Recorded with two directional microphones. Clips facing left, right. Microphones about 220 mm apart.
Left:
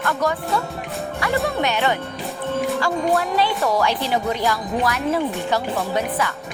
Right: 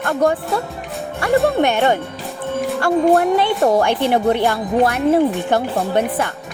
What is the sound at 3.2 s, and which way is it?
A woman's voice, 60° right (ahead or behind).